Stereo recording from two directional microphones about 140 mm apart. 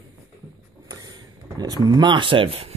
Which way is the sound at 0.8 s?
30° right (ahead or behind).